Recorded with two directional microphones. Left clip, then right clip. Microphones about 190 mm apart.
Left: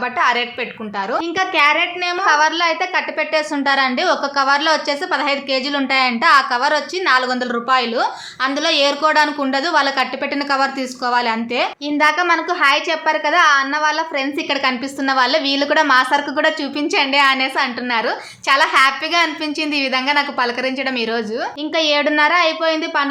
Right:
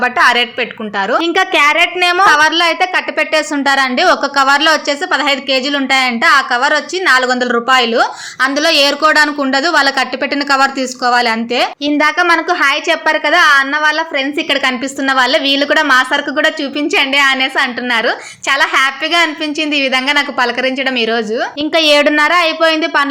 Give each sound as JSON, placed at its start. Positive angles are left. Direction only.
{"t": 0.0, "sound": "a woman's voice", "side_deg": -30}
{"t": 2.2, "sound": "a woman's voice", "side_deg": -25}